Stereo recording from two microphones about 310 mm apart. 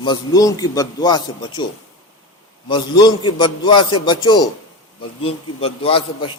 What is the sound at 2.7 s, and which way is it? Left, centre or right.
A man's voice, centre.